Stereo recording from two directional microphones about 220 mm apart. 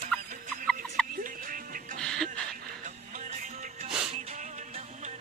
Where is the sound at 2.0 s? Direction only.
Centre (ahead or behind).